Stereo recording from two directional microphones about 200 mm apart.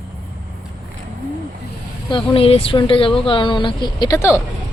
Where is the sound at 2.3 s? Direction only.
30° left (ahead or behind).